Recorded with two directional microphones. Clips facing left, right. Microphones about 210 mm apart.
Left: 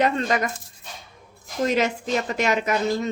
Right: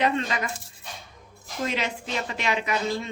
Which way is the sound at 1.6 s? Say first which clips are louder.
Left 7 dB; 45° left (ahead or behind).